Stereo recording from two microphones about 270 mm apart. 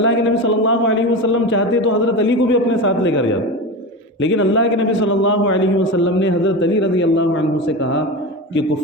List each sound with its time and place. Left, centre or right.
0.0 s a man's voice: left